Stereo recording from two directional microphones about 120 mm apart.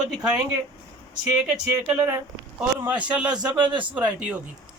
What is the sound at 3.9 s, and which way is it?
Speech, 10° right (ahead or behind).